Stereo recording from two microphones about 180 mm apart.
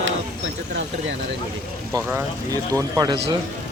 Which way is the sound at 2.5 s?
20° right (ahead or behind).